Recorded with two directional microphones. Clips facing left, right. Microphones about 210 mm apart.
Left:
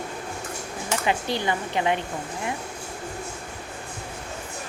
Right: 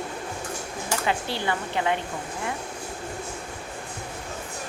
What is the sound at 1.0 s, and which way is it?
Speech, 15° left (ahead or behind).